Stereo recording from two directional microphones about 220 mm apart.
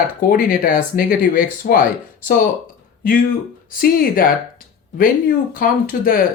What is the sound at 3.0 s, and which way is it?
Speech, 40° left (ahead or behind).